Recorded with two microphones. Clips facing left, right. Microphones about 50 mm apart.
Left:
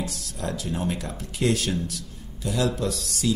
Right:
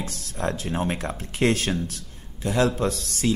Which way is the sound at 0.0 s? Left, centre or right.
Right.